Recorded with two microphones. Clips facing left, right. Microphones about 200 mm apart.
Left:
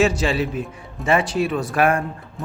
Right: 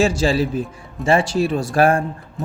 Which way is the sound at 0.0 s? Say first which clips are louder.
Right 2 dB; 30° right (ahead or behind).